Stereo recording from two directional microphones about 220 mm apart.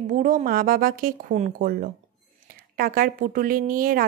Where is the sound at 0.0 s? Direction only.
35° right (ahead or behind).